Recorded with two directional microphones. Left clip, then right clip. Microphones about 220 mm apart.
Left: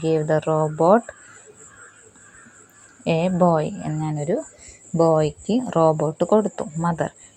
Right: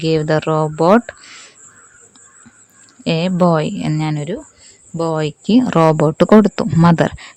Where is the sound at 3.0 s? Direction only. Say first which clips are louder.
Right 3 dB; 25° right (ahead or behind).